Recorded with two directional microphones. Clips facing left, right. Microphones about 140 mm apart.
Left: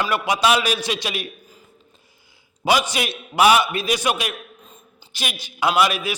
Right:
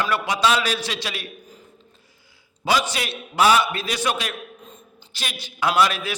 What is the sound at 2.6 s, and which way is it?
A man's voice, 15° left (ahead or behind).